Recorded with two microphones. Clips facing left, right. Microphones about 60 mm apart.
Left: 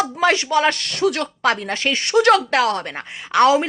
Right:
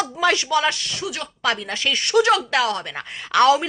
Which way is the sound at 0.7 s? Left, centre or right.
Left.